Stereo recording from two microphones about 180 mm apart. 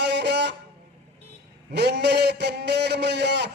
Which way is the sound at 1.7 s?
70° right (ahead or behind).